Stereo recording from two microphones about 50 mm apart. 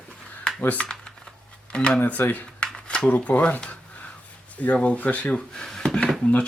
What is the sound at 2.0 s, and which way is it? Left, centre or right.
Speech, left.